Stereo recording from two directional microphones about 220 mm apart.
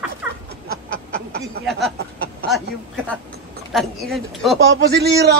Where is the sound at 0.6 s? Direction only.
45° right (ahead or behind).